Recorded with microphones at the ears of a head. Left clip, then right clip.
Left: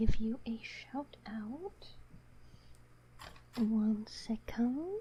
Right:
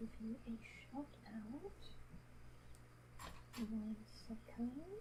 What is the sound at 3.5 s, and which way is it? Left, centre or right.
Speech, left.